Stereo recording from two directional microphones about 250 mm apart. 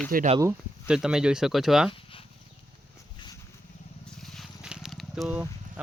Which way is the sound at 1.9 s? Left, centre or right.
Left.